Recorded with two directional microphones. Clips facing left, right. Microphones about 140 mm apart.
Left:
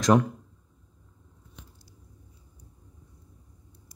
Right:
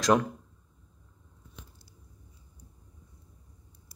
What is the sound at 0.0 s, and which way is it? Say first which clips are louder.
Speech: left 3 dB; 20° left (ahead or behind).